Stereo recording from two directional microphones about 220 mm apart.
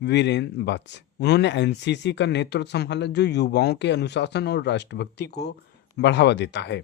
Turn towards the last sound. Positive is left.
turn(degrees=50)  # may be behind; listen again after turning